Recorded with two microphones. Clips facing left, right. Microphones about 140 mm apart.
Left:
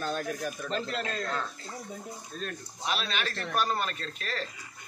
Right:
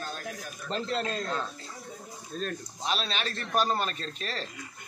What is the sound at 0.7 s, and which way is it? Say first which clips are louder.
Speech: right 5 dB; 35° right (ahead or behind).